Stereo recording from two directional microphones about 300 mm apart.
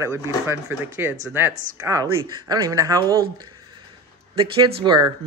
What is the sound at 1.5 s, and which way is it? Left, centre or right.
Speech, right.